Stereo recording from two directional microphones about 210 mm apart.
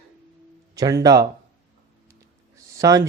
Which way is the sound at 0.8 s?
15° right (ahead or behind).